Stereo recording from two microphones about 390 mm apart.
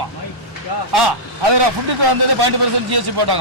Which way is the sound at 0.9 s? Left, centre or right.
Right.